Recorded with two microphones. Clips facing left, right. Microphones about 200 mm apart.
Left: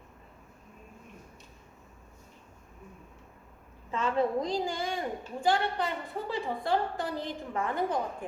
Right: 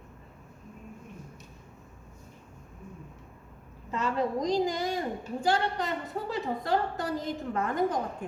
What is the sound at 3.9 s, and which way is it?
A woman's voice, 40° right (ahead or behind).